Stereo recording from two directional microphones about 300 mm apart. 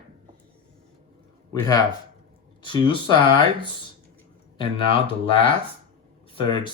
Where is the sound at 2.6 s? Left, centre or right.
Centre.